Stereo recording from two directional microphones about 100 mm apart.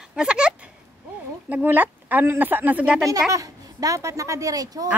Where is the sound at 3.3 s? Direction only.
35° right (ahead or behind).